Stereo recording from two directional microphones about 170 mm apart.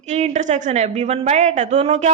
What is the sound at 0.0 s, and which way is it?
A woman's voice, 45° right (ahead or behind).